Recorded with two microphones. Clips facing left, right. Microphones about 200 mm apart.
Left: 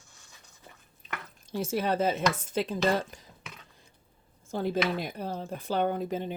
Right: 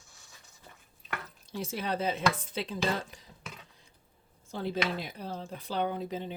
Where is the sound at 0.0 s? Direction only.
Centre (ahead or behind).